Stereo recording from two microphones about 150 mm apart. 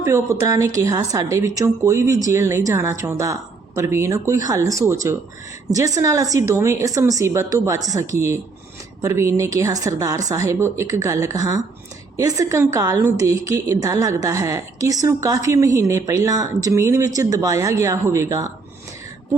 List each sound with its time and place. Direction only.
0.0 s a woman's voice: 20° right (ahead or behind)
9.0 s a woman's voice: 20° right (ahead or behind)